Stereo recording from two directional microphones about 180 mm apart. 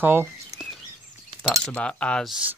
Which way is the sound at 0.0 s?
10° right (ahead or behind).